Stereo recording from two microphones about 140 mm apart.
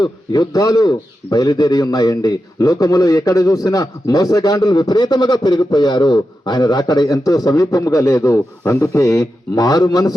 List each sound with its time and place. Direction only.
0.0 s a man's voice: 30° left (ahead or behind)